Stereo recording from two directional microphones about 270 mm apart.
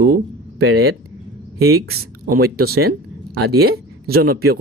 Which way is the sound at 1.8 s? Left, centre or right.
Right.